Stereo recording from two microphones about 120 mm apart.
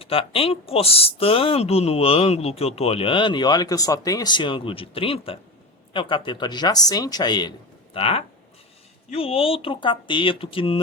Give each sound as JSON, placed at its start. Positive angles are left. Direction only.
{"t": 0.0, "sound": "speech", "side_deg": 50}
{"t": 7.9, "sound": "speech", "side_deg": 55}